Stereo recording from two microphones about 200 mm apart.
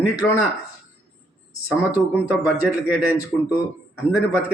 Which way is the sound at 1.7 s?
5° right (ahead or behind).